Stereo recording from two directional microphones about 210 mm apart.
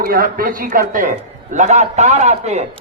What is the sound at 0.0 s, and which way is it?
A man's voice, 45° right (ahead or behind).